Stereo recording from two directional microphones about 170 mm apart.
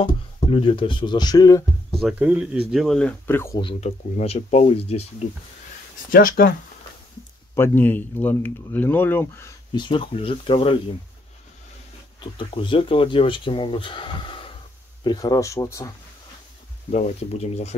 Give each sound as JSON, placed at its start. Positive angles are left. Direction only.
{"t": 0.0, "sound": "speech", "side_deg": 30}
{"t": 1.9, "sound": "speech", "side_deg": 0}
{"t": 3.8, "sound": "speech", "side_deg": 40}
{"t": 6.1, "sound": "speech", "side_deg": 55}
{"t": 7.5, "sound": "speech", "side_deg": 10}
{"t": 9.8, "sound": "speech", "side_deg": 30}
{"t": 12.2, "sound": "speech", "side_deg": 30}
{"t": 16.9, "sound": "speech", "side_deg": 40}